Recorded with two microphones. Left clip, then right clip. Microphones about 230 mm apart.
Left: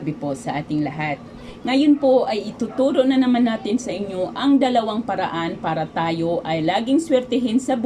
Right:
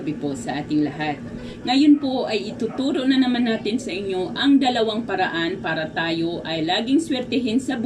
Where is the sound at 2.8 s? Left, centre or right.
Left.